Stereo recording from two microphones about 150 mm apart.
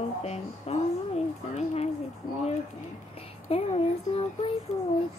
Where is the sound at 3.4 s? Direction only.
40° left (ahead or behind).